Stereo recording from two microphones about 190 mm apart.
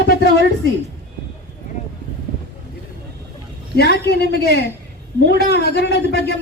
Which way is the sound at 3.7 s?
60° left (ahead or behind).